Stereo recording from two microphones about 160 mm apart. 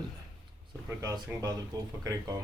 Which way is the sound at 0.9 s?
20° right (ahead or behind).